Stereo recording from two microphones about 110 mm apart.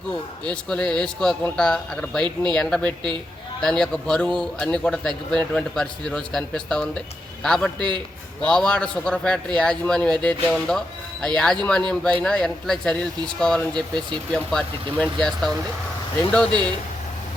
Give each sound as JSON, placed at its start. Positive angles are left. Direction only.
{"t": 0.5, "sound": "a man's voice", "side_deg": 10}
{"t": 13.7, "sound": "speech", "side_deg": -45}
{"t": 14.3, "sound": "a man's voice", "side_deg": 10}